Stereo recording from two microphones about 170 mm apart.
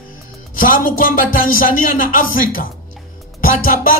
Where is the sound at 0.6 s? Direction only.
55° left (ahead or behind).